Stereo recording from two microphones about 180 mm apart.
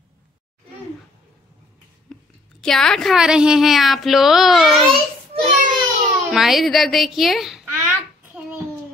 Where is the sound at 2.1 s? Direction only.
5° left (ahead or behind).